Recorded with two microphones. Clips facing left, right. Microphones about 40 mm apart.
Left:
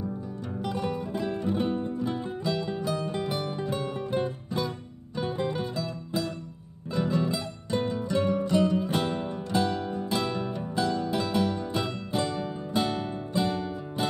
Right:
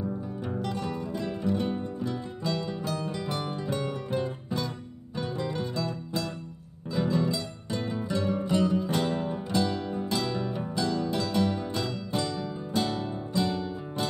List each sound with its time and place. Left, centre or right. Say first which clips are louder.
0.6 s music: left 4 dB; centre
5.2 s music: left 2 dB; left
5.8 s music: even; centre
8.3 s music: left 1 dB; centre
8.7 s music: even; centre